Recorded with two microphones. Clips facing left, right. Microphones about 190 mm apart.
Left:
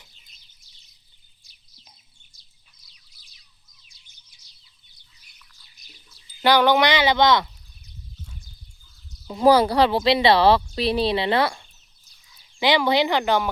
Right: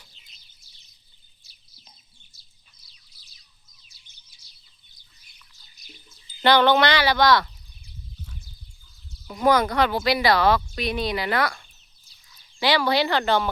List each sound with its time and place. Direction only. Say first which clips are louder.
1.5 s a sound: even; 5° right (ahead or behind)
6.4 s speech: even; 10° left (ahead or behind)
9.2 s speech: left 4 dB; 30° left (ahead or behind)